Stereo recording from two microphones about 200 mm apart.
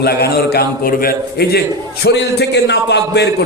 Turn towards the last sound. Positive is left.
turn(degrees=55)  # may be behind; listen again after turning